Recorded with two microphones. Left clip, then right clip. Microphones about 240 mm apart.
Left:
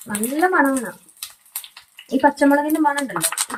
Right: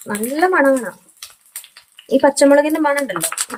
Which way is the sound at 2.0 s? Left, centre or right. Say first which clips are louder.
Right 4 dB; right.